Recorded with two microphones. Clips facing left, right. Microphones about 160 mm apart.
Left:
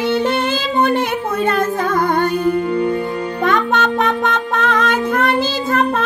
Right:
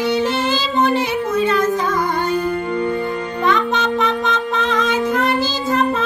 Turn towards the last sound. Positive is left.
turn(degrees=60)  # may be behind; listen again after turning